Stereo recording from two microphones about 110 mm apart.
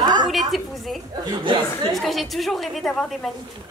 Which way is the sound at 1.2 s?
45° right (ahead or behind).